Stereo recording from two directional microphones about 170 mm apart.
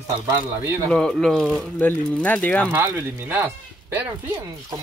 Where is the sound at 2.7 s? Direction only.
10° right (ahead or behind).